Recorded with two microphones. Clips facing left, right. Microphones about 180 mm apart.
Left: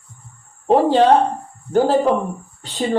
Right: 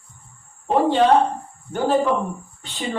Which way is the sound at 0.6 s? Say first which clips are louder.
Left 4 dB; 40° left (ahead or behind).